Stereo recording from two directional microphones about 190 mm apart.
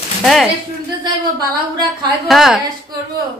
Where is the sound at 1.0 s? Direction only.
20° right (ahead or behind).